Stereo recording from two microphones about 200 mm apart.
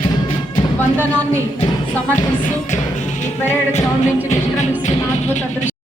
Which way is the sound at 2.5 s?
35° left (ahead or behind).